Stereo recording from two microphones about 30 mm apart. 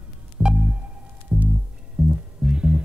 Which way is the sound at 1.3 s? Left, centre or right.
Right.